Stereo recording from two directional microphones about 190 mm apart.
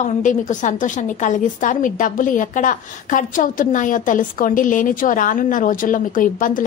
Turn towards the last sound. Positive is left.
turn(degrees=45)  # may be behind; listen again after turning